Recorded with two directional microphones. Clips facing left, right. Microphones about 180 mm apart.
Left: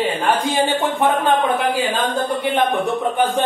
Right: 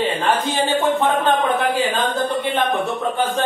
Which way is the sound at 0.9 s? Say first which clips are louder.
Left 1 dB; 15° left (ahead or behind).